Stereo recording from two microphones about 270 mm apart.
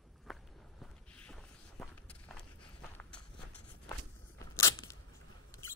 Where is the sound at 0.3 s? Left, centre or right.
Centre.